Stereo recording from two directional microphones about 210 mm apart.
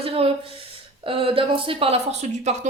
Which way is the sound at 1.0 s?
25° right (ahead or behind).